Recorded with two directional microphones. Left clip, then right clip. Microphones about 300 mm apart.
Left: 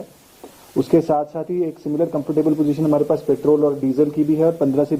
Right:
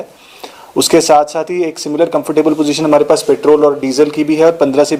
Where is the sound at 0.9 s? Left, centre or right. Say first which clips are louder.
Right 9 dB; centre.